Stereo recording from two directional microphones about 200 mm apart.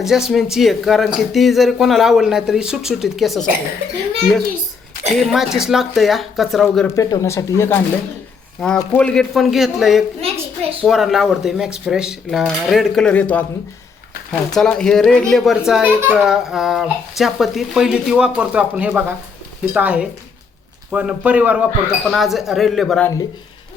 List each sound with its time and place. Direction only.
0.0 s a child's voice: centre (ahead or behind)
5.0 s a child's voice: centre (ahead or behind)
6.8 s a child's voice: 15° left (ahead or behind); by 10.0 s centre (ahead or behind)
10.2 s a sound: 30° right (ahead or behind)
10.8 s a child's voice: centre (ahead or behind)
14.5 s a child's voice: 5° left (ahead or behind)